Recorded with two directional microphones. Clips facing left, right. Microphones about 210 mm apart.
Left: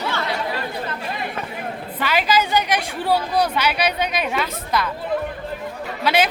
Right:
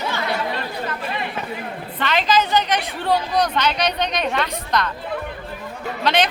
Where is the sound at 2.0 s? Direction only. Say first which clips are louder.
Right 1 dB; 10° left (ahead or behind).